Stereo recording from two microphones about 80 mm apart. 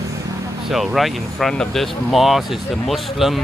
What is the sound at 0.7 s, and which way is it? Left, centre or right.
Speech, centre.